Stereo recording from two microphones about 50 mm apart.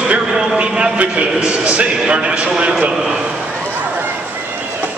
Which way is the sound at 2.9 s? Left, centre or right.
Centre.